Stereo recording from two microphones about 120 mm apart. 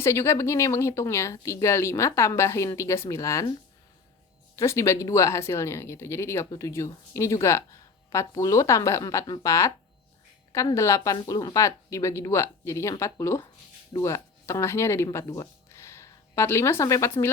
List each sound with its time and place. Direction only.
0.0 s speech: 20° left (ahead or behind)
4.5 s speech: 25° left (ahead or behind)